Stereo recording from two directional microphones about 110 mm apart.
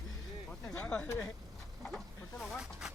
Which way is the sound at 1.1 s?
25° left (ahead or behind).